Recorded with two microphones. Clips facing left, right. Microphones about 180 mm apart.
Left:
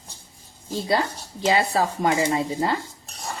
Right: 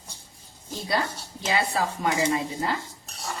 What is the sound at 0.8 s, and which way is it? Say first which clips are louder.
Speech: left 4 dB; 30° left (ahead or behind).